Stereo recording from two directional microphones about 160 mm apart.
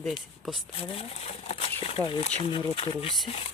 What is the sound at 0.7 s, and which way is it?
Speech, 35° left (ahead or behind).